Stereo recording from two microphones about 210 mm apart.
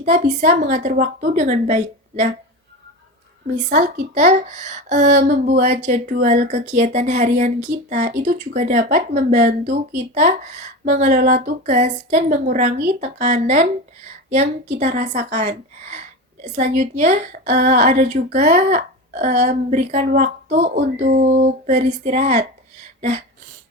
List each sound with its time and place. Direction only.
0.0 s a woman's voice: 35° right (ahead or behind)
3.5 s a woman's voice: 35° right (ahead or behind)
19.3 s a woman's voice: 50° right (ahead or behind)
23.0 s a sound: 30° right (ahead or behind)